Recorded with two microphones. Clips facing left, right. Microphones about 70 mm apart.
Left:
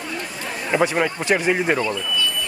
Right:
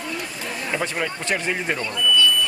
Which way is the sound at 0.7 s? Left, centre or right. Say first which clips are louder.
Left 7 dB; left.